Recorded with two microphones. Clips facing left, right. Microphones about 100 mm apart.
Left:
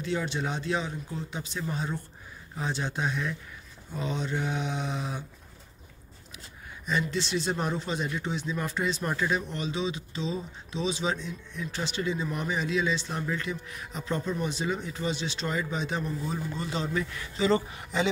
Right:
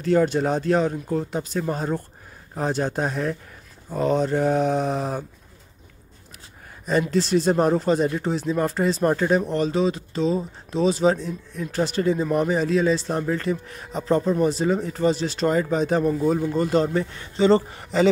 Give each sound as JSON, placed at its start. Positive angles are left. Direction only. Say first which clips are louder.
{"t": 0.0, "sound": "speech", "louder": "right 11 dB", "side_deg": -45}
{"t": 6.9, "sound": "speech", "louder": "right 9 dB", "side_deg": -40}